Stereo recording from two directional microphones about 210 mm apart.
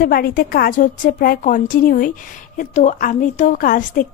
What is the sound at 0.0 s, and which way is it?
A woman's voice, 45° left (ahead or behind).